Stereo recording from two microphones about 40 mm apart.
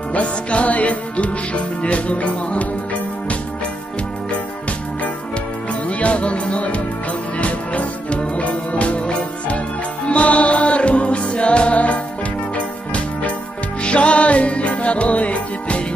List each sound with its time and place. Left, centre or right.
0.1 s music: left
5.9 s music: left